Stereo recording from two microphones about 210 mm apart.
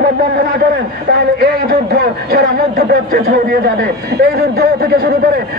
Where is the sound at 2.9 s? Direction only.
40° right (ahead or behind).